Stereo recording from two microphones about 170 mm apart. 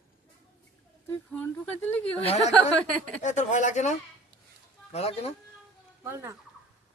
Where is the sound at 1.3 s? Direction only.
10° left (ahead or behind).